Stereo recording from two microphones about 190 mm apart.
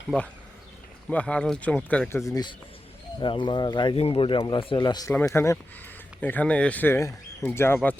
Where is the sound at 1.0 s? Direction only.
5° left (ahead or behind).